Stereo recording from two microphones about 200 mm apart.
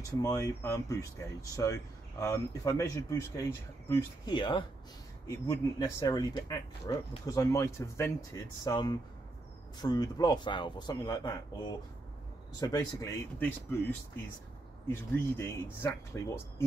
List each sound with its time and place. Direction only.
0.1 s a man's voice: 15° left (ahead or behind)